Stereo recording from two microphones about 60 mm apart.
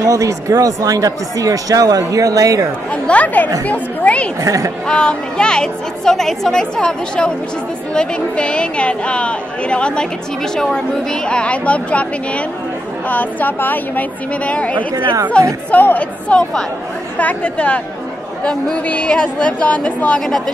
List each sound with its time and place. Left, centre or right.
0.0 s speech: right
2.9 s a woman's voice: left
4.4 s speech: right
4.8 s a woman's voice: centre
15.7 s a woman's voice: left
20.2 s a woman's voice: centre